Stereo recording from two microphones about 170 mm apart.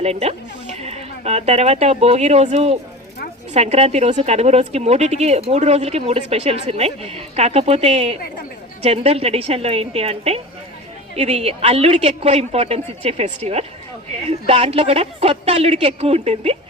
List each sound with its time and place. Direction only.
0.0 s speech: 40° right (ahead or behind)